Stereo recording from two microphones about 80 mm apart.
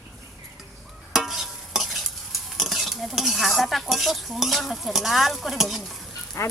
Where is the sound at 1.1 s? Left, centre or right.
Centre.